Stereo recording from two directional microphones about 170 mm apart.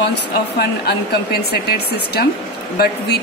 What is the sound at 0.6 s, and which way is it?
Speech, 70° left (ahead or behind).